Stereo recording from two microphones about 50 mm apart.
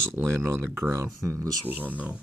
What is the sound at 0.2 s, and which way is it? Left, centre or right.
Speech, right.